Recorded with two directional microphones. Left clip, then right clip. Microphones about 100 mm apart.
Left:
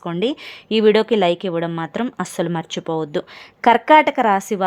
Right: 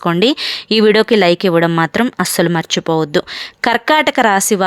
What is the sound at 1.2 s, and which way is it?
A woman's voice, 60° right (ahead or behind).